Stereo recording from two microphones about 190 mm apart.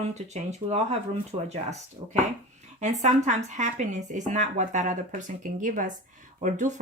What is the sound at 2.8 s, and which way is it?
Speech, 40° right (ahead or behind).